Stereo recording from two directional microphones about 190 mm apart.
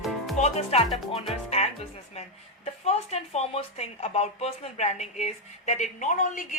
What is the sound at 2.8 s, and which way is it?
Speech, 35° left (ahead or behind).